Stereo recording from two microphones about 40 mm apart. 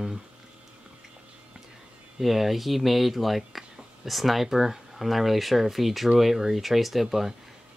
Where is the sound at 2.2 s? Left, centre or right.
Centre.